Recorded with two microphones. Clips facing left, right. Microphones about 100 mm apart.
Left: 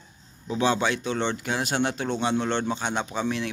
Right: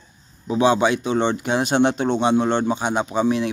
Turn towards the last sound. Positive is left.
turn(degrees=-15)  # may be behind; listen again after turning